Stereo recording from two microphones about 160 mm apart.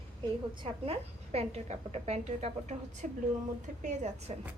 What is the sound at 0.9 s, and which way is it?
A woman's voice, 40° right (ahead or behind).